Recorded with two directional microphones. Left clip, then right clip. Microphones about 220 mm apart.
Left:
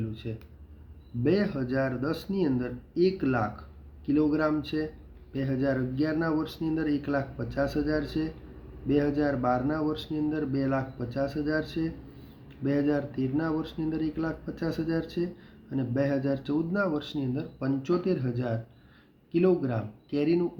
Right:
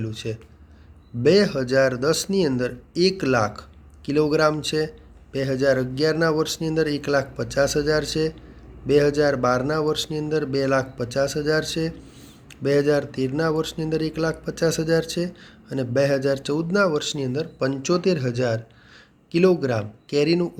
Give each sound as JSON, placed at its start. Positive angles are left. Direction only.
{"t": 0.1, "sound": "a man's voice", "side_deg": -40}